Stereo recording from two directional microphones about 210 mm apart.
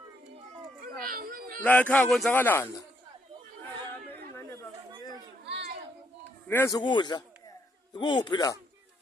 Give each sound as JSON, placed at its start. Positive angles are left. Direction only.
{"t": 1.0, "sound": "a child's voice", "side_deg": -40}
{"t": 1.6, "sound": "speech", "side_deg": 5}
{"t": 3.9, "sound": "chatter", "side_deg": 10}
{"t": 6.5, "sound": "a man's voice", "side_deg": 15}